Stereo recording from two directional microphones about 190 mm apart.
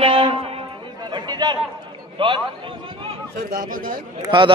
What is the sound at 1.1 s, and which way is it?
Chatter, 20° right (ahead or behind).